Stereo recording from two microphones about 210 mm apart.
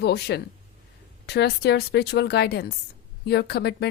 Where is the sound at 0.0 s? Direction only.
50° left (ahead or behind).